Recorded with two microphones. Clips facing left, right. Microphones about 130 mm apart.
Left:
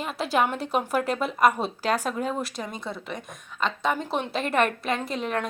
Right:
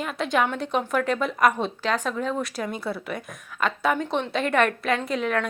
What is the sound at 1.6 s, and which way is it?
Speech, 40° left (ahead or behind).